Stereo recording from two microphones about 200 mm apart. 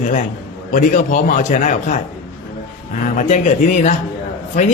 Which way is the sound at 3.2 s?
35° left (ahead or behind).